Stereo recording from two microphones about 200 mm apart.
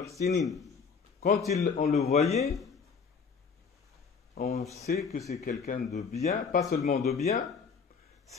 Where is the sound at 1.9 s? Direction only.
35° left (ahead or behind).